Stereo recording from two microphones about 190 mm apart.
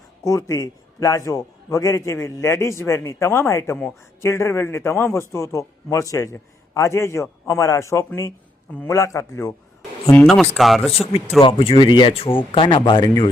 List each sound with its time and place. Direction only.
0.3 s a man's voice: 15° left (ahead or behind)
10.1 s speech: 5° left (ahead or behind)
10.9 s speech: 30° left (ahead or behind)